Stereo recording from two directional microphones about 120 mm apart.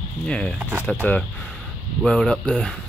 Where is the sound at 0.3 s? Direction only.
10° left (ahead or behind).